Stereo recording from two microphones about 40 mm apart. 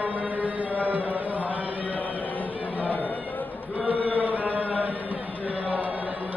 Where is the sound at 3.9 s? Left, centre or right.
Right.